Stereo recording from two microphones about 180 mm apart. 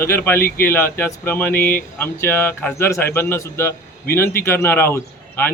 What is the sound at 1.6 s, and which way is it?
Speech, 50° left (ahead or behind).